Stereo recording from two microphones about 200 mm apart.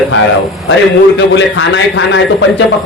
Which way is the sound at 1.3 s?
65° left (ahead or behind).